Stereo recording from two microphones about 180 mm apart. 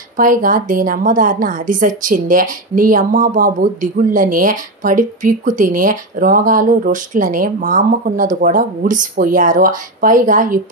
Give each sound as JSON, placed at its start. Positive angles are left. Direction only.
{"t": 0.2, "sound": "a woman's voice", "side_deg": -50}